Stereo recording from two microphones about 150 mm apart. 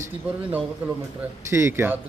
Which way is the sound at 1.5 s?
15° right (ahead or behind).